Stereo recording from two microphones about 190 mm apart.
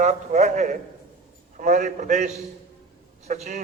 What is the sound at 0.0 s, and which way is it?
A man's voice, 35° right (ahead or behind).